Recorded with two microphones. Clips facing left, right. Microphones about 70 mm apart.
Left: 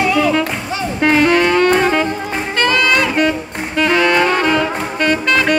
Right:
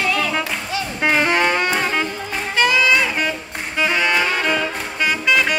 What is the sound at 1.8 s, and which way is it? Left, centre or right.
Music, centre.